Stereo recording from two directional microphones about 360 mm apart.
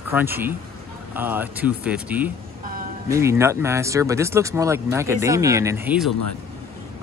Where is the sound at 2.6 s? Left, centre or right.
Right.